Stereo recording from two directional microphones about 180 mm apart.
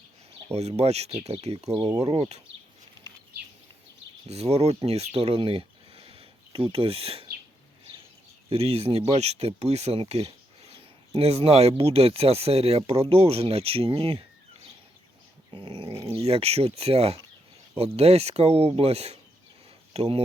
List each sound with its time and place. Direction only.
0.4 s speech: 35° right (ahead or behind)
4.3 s speech: 35° right (ahead or behind)
8.4 s speech: 35° right (ahead or behind)